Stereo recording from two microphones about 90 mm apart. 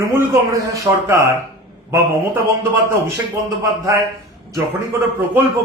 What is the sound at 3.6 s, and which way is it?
Speech, 35° right (ahead or behind).